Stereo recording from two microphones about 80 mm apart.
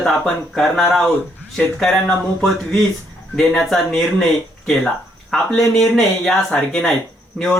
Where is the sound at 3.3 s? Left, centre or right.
Centre.